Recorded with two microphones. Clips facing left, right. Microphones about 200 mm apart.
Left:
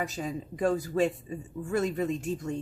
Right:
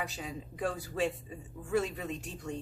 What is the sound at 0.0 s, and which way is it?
Speech, 45° left (ahead or behind).